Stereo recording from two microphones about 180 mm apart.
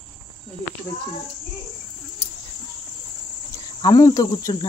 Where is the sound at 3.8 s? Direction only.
20° left (ahead or behind).